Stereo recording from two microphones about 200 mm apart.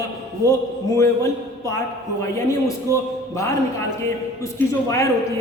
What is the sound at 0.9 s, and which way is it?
Speech, 15° left (ahead or behind).